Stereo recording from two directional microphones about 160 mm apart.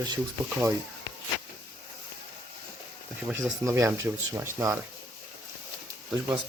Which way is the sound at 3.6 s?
20° right (ahead or behind).